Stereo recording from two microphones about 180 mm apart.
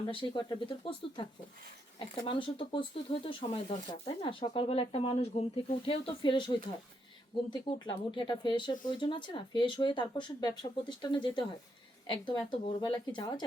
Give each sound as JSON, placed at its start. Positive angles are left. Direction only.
{"t": 0.0, "sound": "speech", "side_deg": 25}